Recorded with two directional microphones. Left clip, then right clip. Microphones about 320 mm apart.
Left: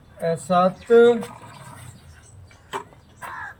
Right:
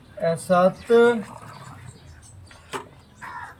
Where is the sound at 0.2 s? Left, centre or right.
Centre.